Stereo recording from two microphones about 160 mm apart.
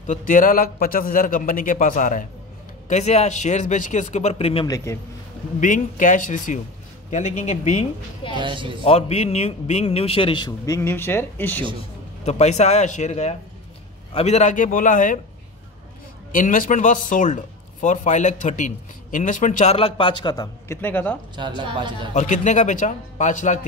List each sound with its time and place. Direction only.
0.0 s a man's voice: 55° left (ahead or behind)
4.6 s a man's voice: 20° left (ahead or behind)
5.6 s a man's voice: 55° left (ahead or behind)
8.4 s speech: 30° right (ahead or behind)
8.8 s a man's voice: 40° left (ahead or behind); by 11.6 s 10° left (ahead or behind)
12.3 s a man's voice: 45° left (ahead or behind)
16.3 s a man's voice: 55° left (ahead or behind); by 20.4 s 30° left (ahead or behind)
20.6 s speech: 15° left (ahead or behind)
21.4 s speech: 30° right (ahead or behind)
22.1 s a man's voice: 50° left (ahead or behind)